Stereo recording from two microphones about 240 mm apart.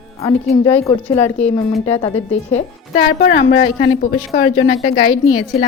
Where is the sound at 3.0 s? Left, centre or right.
Left.